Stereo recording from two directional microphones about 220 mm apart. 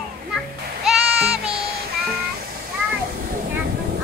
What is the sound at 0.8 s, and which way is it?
Music, centre (ahead or behind).